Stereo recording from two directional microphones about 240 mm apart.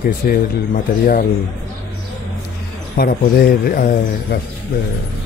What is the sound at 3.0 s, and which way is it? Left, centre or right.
A man's voice, left.